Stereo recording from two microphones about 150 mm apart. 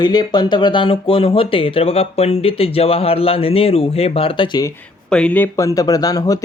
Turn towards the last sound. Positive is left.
turn(degrees=25)  # may be behind; listen again after turning